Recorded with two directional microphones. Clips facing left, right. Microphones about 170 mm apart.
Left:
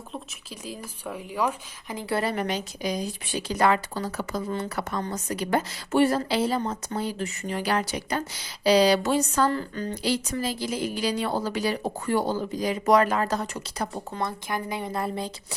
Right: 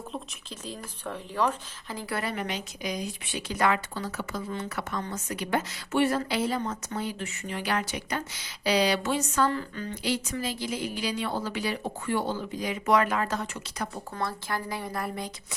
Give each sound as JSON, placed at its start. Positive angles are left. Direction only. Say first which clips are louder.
{"t": 0.6, "sound": "a woman's voice", "louder": "left 1 dB", "side_deg": 10}
{"t": 2.0, "sound": "a woman's voice", "louder": "left 6 dB", "side_deg": 30}
{"t": 14.2, "sound": "speech", "louder": "left 2 dB", "side_deg": 20}